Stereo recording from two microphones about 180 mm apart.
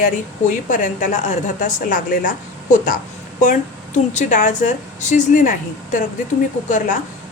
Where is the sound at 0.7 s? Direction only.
45° left (ahead or behind).